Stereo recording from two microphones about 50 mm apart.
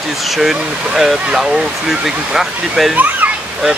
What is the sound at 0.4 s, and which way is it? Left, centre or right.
Speech, centre.